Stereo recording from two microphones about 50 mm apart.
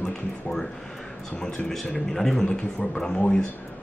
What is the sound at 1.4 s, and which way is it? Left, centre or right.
A man's voice, centre.